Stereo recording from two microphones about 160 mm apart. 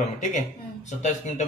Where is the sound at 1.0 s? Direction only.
45° left (ahead or behind).